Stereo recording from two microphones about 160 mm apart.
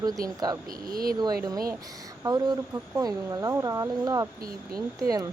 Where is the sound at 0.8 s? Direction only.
65° right (ahead or behind).